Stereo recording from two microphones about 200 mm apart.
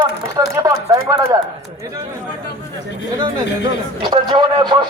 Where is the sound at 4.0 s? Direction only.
25° right (ahead or behind).